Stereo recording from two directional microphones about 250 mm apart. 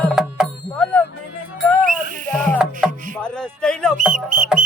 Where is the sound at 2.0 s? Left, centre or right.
Right.